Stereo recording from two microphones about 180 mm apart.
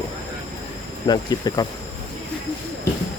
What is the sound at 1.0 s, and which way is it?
Speech, 25° left (ahead or behind).